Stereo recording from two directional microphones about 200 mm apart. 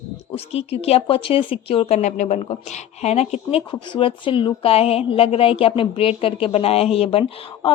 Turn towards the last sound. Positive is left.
turn(degrees=25)  # may be behind; listen again after turning